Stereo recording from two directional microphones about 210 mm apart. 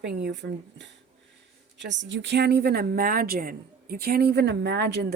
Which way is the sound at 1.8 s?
60° right (ahead or behind).